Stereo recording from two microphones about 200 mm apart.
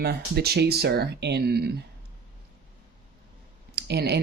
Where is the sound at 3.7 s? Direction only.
55° right (ahead or behind).